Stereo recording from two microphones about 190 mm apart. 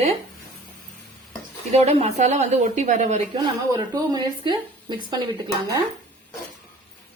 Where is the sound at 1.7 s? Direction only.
35° right (ahead or behind).